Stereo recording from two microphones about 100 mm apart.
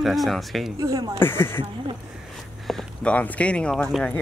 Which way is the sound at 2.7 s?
15° left (ahead or behind).